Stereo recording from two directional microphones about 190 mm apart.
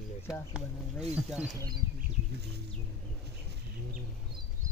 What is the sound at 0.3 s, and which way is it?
Speech, 5° right (ahead or behind).